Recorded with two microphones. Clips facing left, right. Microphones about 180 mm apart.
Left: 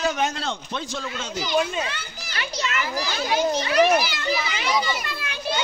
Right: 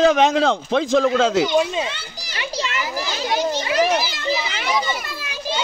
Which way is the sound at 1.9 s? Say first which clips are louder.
Right 3 dB; 25° right (ahead or behind).